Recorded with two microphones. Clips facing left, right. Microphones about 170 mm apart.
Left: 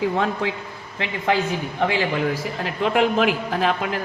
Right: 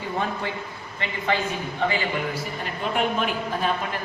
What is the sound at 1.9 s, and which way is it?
A man's voice, 90° left.